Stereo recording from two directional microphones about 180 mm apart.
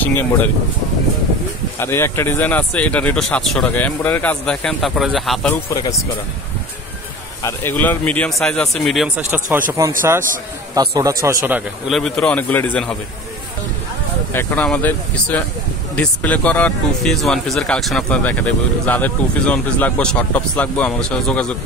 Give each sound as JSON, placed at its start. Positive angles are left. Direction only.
{"t": 0.0, "sound": "speech", "side_deg": 10}
{"t": 1.8, "sound": "speech", "side_deg": 15}
{"t": 5.5, "sound": "speech", "side_deg": 20}
{"t": 7.4, "sound": "speech", "side_deg": 10}
{"t": 11.0, "sound": "speech", "side_deg": -20}
{"t": 11.9, "sound": "speech", "side_deg": 5}
{"t": 14.3, "sound": "speech", "side_deg": 10}